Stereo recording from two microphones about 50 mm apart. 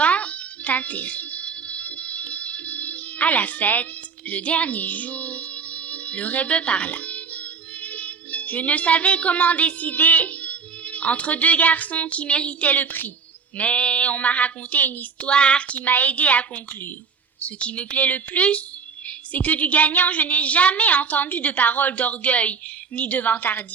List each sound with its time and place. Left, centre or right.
0.0 s music: left
13.6 s speech: left
15.3 s speech: left
15.8 s a woman's voice: left